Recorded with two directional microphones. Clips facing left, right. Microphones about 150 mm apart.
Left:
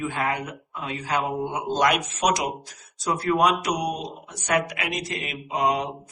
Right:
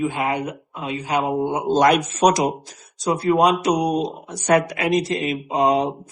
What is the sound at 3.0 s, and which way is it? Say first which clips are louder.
Speech: right 4 dB; 25° right (ahead or behind).